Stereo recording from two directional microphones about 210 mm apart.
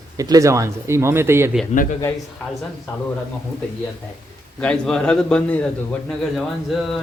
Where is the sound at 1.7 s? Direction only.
40° left (ahead or behind).